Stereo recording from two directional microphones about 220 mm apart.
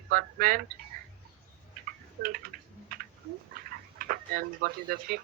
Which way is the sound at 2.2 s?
40° right (ahead or behind).